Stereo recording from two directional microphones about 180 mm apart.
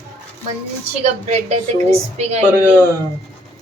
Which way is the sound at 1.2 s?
35° right (ahead or behind).